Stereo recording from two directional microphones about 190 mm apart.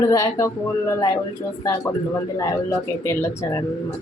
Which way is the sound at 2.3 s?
15° left (ahead or behind).